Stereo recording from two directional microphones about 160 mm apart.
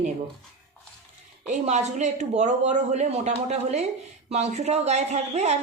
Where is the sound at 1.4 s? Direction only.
45° right (ahead or behind).